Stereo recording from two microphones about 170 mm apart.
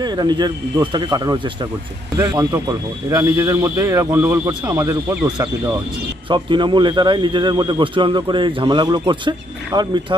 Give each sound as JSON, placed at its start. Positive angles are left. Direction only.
{"t": 0.0, "sound": "a man's voice", "side_deg": -25}